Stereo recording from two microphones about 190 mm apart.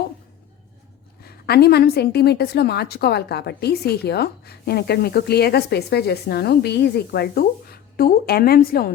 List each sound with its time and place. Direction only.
1.2 s a woman's voice: 55° left (ahead or behind)